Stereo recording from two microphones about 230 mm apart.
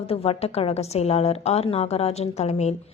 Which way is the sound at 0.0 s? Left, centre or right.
Left.